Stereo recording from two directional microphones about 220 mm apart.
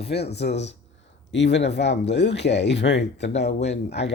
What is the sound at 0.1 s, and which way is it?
Speech, 50° left (ahead or behind).